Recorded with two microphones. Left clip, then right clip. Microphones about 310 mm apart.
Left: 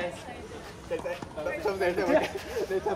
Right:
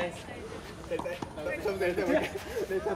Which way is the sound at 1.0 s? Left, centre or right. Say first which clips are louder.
Left 2 dB; centre.